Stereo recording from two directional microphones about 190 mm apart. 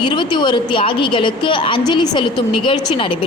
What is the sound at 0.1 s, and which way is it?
A woman's voice, 25° left (ahead or behind).